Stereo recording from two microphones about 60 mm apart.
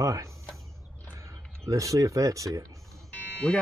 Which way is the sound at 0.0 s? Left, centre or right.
Right.